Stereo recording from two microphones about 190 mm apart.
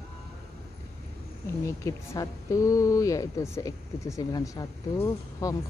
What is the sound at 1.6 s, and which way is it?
Speech, 15° left (ahead or behind).